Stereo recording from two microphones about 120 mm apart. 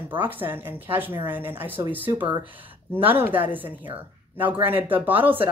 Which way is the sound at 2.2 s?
40° right (ahead or behind).